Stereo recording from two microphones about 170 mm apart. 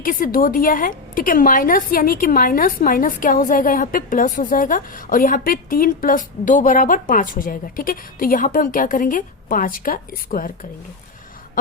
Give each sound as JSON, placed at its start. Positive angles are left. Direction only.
{"t": 0.0, "sound": "a woman's voice", "side_deg": 55}